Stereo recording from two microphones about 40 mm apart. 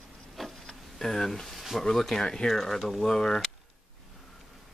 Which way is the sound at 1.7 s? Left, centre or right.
Centre.